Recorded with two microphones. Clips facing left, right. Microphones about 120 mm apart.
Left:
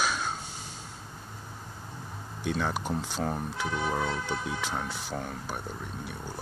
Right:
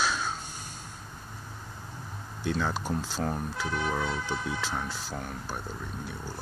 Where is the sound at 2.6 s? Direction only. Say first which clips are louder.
Even; 15° left (ahead or behind).